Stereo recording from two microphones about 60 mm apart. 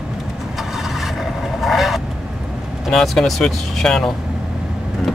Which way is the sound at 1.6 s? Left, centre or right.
Centre.